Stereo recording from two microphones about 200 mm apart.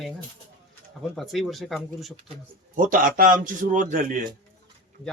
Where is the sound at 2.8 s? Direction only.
40° right (ahead or behind).